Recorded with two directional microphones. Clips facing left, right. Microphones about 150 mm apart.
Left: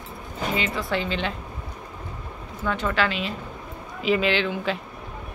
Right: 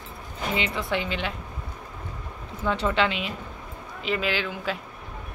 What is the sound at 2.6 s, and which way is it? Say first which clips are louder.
Speech: right 1 dB; 25° right (ahead or behind).